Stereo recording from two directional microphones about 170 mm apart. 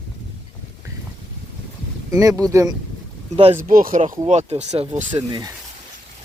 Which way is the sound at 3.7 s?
55° right (ahead or behind).